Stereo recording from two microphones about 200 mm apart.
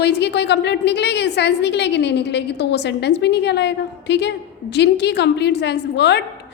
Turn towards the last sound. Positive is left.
turn(degrees=60)  # may be behind; listen again after turning